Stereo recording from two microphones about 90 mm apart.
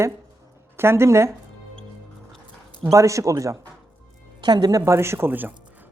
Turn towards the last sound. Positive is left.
turn(degrees=-20)  # may be behind; listen again after turning